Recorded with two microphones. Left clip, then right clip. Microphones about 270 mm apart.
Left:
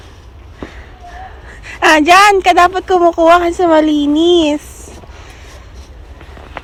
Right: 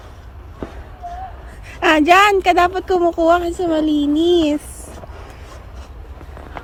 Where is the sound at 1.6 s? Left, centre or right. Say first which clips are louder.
Left 5 dB; centre.